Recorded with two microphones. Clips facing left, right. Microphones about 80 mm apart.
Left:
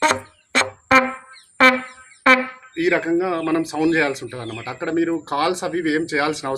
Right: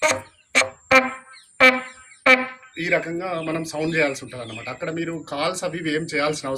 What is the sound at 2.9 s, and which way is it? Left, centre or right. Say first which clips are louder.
Speech: left 1 dB; left.